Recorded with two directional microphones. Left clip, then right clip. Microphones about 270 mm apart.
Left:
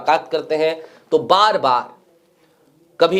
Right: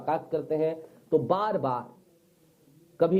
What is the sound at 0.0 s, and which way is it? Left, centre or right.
Speech, centre.